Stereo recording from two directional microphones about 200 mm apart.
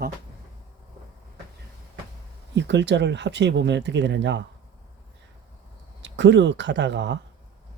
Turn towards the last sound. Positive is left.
turn(degrees=-60)  # may be behind; listen again after turning